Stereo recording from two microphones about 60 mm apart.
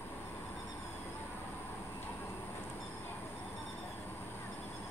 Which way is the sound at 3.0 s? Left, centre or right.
Left.